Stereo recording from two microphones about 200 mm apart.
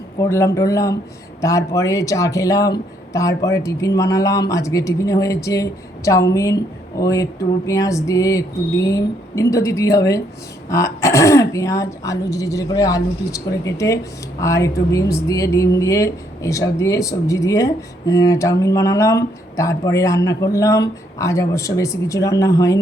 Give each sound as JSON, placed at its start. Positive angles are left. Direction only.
{"t": 0.2, "sound": "speech", "side_deg": 15}